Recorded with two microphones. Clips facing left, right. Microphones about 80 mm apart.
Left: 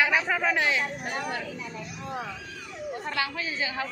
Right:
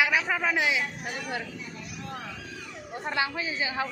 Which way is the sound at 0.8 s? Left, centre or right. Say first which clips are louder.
Left 3 dB; left.